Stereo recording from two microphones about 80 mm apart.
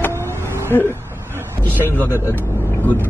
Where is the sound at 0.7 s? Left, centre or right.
Left.